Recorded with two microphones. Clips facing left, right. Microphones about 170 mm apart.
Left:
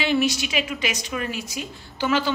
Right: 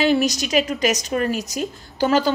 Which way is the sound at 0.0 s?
40° right (ahead or behind).